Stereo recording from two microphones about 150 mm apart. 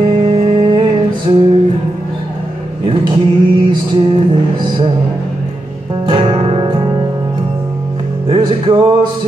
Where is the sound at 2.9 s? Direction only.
35° right (ahead or behind).